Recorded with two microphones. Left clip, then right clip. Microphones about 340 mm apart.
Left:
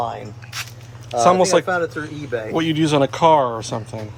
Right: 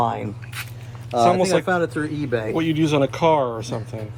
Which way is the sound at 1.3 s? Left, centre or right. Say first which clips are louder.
Left 5 dB; centre.